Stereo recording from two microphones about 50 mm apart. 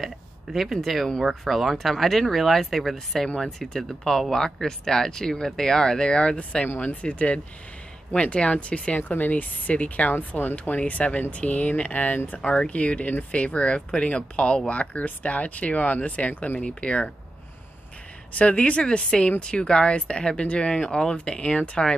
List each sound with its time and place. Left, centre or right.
0.0 s speech: centre; by 17.1 s left
18.3 s speech: left